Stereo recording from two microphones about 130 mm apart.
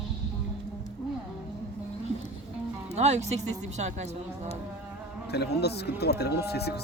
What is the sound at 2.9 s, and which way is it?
Speech, 60° right (ahead or behind).